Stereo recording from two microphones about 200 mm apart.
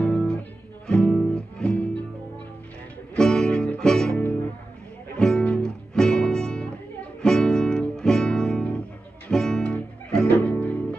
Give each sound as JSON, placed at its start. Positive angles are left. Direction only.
{"t": 0.0, "sound": "music", "side_deg": 5}
{"t": 3.2, "sound": "music", "side_deg": 5}
{"t": 5.2, "sound": "music", "side_deg": 5}
{"t": 7.2, "sound": "guitar", "side_deg": 5}
{"t": 9.3, "sound": "music", "side_deg": 5}